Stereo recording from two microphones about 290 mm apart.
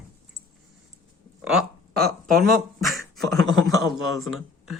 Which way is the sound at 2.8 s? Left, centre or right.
Centre.